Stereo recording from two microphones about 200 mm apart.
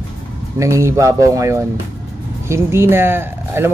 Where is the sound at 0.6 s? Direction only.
15° right (ahead or behind).